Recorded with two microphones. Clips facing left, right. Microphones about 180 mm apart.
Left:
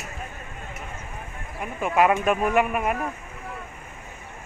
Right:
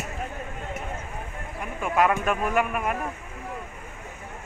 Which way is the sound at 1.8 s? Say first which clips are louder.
Left 3 dB; 10° left (ahead or behind).